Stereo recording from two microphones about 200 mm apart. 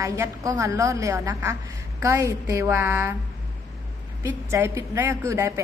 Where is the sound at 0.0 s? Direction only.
15° right (ahead or behind).